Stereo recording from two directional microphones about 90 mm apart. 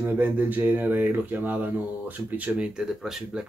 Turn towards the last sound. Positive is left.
turn(degrees=-5)  # may be behind; listen again after turning